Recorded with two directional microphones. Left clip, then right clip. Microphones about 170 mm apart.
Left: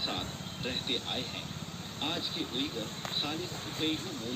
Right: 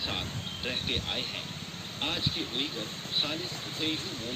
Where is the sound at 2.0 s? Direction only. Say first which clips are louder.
Right 3 dB; 90° left.